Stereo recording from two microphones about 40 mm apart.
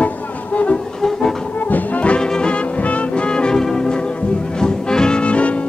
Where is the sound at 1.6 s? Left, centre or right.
Left.